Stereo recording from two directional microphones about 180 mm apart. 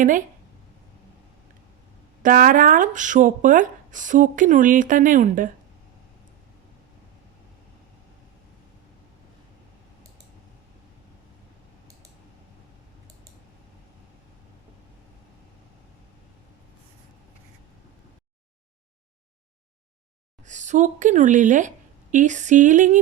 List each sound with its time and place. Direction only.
2.2 s speech: 50° right (ahead or behind)
20.4 s speech: 40° right (ahead or behind)